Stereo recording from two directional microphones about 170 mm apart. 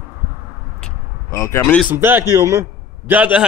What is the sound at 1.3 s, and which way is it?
Speech, 15° left (ahead or behind).